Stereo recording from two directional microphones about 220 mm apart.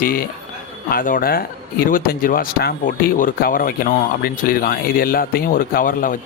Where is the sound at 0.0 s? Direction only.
40° left (ahead or behind).